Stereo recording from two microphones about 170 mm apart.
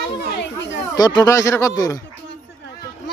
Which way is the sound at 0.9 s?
25° left (ahead or behind).